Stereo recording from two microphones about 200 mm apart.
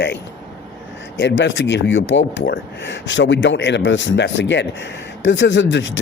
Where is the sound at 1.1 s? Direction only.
65° left (ahead or behind).